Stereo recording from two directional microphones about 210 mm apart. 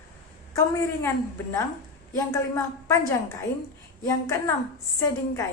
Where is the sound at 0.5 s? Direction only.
15° left (ahead or behind).